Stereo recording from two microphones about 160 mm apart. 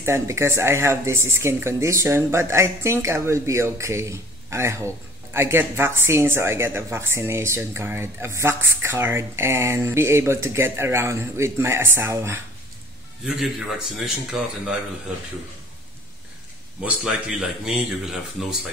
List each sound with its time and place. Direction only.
0.0 s speech: 15° right (ahead or behind)
13.2 s speech: centre (ahead or behind)
16.8 s speech: 5° right (ahead or behind)